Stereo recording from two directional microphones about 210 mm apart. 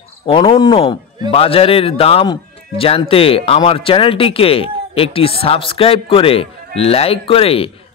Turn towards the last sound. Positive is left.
turn(degrees=25)  # may be behind; listen again after turning